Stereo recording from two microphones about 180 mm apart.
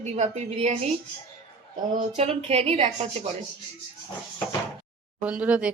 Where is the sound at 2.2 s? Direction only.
35° right (ahead or behind).